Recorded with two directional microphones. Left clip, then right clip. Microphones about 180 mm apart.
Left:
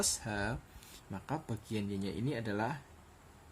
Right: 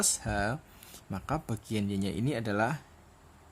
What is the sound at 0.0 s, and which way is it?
Speech, 30° right (ahead or behind).